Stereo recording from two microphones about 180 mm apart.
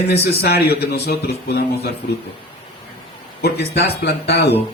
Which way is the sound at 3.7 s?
65° left (ahead or behind).